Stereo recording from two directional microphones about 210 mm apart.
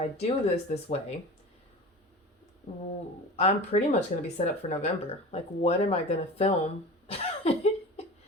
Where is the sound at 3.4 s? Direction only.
30° left (ahead or behind).